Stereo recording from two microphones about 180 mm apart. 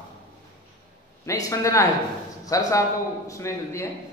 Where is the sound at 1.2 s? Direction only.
20° left (ahead or behind).